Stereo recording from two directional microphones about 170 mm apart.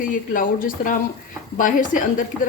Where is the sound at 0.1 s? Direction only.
50° left (ahead or behind).